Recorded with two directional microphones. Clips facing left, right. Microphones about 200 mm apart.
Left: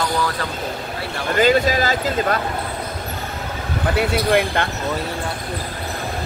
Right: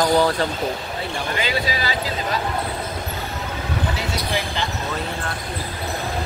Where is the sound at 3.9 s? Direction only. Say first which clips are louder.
Left 8 dB; 60° left (ahead or behind).